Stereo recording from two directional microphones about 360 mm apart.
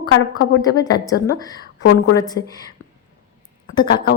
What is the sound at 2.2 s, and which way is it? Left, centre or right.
Speech, centre.